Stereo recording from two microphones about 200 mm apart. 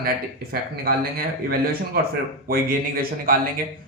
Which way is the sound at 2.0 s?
50° right (ahead or behind).